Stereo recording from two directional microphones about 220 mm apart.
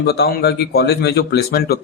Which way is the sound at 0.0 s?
45° left (ahead or behind).